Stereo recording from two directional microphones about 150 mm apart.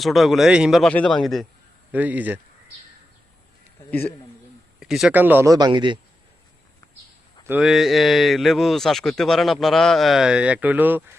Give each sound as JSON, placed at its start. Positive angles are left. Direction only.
{"t": 0.0, "sound": "speech", "side_deg": 0}
{"t": 1.9, "sound": "speech", "side_deg": -10}
{"t": 4.8, "sound": "speech", "side_deg": -5}
{"t": 7.6, "sound": "speech", "side_deg": 0}